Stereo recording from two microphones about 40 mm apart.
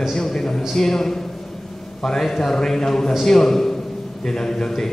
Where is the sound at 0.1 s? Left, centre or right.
Centre.